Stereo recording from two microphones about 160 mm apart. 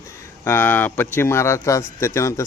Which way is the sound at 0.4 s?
10° left (ahead or behind).